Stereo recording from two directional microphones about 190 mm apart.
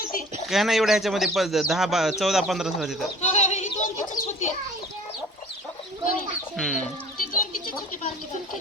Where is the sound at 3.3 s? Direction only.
40° left (ahead or behind).